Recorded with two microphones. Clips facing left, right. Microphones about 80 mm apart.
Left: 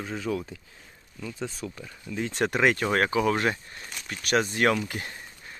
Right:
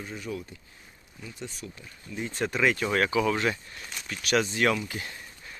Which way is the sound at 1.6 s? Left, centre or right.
Left.